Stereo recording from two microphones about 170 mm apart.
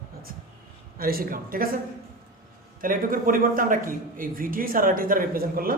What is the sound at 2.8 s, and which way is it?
A man's voice, 55° right (ahead or behind).